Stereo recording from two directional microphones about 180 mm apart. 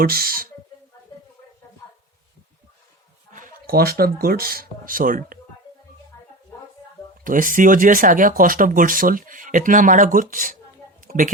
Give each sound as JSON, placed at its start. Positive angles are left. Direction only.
{"t": 0.0, "sound": "speech", "side_deg": -55}
{"t": 3.3, "sound": "speech", "side_deg": -55}
{"t": 7.3, "sound": "speech", "side_deg": -50}
{"t": 11.0, "sound": "a sound", "side_deg": -45}